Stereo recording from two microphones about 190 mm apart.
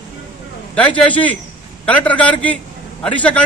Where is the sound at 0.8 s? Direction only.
5° left (ahead or behind).